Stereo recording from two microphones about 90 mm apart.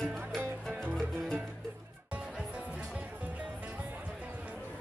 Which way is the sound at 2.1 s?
15° right (ahead or behind).